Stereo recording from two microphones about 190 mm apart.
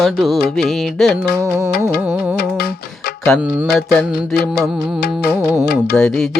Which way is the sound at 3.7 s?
5° left (ahead or behind).